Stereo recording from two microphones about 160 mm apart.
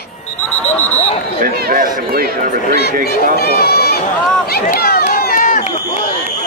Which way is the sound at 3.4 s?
75° left (ahead or behind).